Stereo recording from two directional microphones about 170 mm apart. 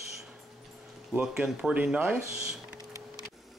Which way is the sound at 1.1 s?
5° right (ahead or behind).